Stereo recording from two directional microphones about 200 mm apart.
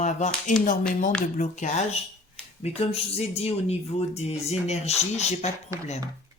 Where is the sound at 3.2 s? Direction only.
30° left (ahead or behind).